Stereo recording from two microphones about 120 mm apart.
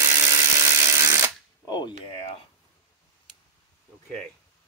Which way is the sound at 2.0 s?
50° left (ahead or behind).